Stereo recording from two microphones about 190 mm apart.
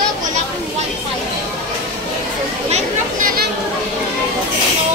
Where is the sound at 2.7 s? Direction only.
35° right (ahead or behind).